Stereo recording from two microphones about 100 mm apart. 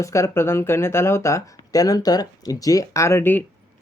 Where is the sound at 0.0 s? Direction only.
30° left (ahead or behind).